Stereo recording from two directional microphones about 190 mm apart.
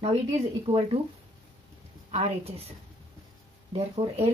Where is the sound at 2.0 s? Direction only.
35° right (ahead or behind).